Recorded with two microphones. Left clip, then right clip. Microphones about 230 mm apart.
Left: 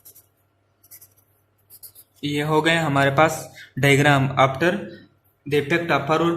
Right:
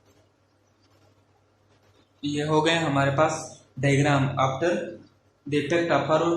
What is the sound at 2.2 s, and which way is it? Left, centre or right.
A man's voice, left.